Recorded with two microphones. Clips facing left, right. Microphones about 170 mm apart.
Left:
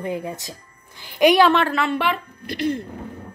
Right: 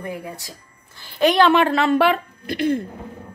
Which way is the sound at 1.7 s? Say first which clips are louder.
Right 5 dB; 35° right (ahead or behind).